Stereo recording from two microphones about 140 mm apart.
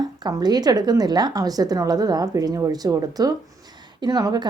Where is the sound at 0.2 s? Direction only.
30° right (ahead or behind).